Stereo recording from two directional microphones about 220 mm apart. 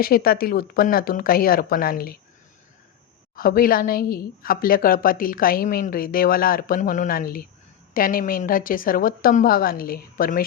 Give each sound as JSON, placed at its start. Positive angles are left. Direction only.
{"t": 0.0, "sound": "speech", "side_deg": 45}
{"t": 3.3, "sound": "a woman's voice", "side_deg": 40}